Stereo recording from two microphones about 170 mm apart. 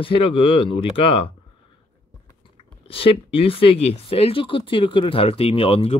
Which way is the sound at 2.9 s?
35° left (ahead or behind).